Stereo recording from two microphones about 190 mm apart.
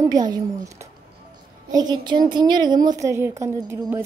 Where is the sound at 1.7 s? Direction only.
20° right (ahead or behind).